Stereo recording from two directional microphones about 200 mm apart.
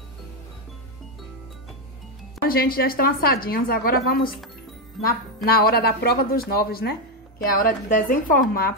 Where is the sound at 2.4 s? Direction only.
45° left (ahead or behind).